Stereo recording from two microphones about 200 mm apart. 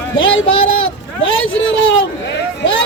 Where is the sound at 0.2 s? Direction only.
75° left (ahead or behind).